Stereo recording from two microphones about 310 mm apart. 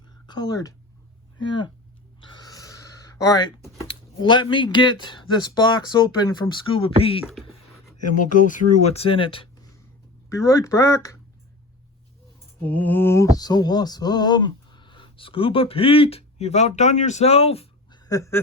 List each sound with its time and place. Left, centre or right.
0.3 s speech: centre
2.2 s gasp: centre
3.2 s speech: centre
12.6 s a sound: centre